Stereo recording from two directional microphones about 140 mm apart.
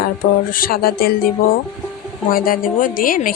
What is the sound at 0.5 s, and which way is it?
A woman's voice, 90° left.